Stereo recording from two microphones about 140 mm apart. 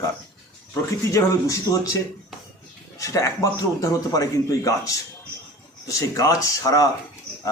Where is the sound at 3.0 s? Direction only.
25° left (ahead or behind).